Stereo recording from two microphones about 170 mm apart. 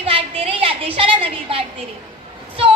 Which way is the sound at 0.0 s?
35° right (ahead or behind).